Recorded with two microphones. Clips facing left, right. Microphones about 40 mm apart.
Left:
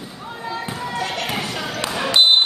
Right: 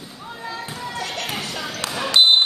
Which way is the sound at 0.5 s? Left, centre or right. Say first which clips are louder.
Left 5 dB; centre.